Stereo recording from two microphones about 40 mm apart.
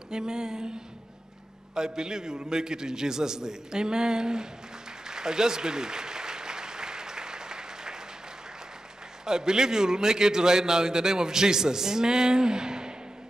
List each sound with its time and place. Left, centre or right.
0.1 s a man's voice: centre
1.8 s a man's voice: centre
5.0 s applause: centre
9.2 s a man's voice: centre